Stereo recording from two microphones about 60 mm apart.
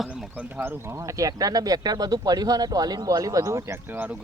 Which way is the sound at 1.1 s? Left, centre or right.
Right.